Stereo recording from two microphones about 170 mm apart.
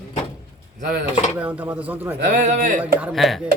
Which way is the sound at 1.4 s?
10° right (ahead or behind).